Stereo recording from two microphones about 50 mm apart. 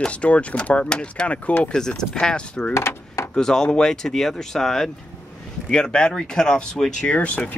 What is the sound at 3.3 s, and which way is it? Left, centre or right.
Speech, centre.